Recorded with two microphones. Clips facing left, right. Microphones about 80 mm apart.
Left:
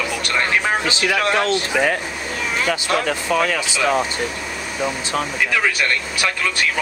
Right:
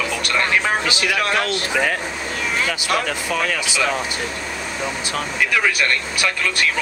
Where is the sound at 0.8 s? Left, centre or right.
Left.